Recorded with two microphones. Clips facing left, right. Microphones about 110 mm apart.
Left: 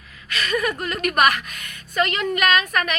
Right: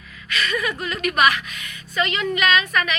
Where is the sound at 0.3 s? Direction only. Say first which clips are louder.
Left 1 dB; 45° left (ahead or behind).